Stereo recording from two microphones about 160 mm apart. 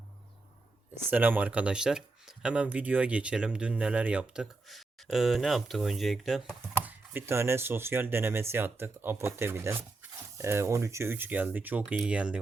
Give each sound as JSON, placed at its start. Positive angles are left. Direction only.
{"t": 1.1, "sound": "speech", "side_deg": -10}